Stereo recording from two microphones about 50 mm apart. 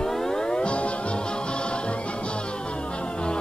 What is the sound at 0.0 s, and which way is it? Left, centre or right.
Music, centre.